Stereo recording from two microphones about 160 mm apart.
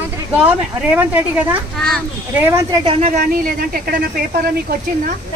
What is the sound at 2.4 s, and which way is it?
Speech, 15° right (ahead or behind).